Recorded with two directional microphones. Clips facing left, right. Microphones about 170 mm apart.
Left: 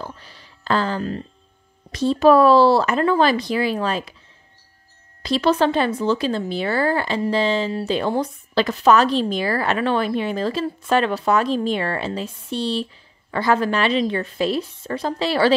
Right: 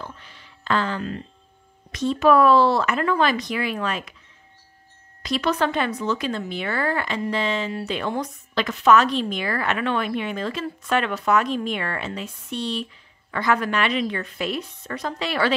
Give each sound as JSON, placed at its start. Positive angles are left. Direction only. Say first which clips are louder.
{"t": 0.0, "sound": "a sound", "louder": "left 3 dB", "side_deg": 35}
{"t": 1.9, "sound": "speech", "louder": "left 4 dB", "side_deg": 35}
{"t": 5.2, "sound": "speech", "louder": "left 5 dB", "side_deg": 30}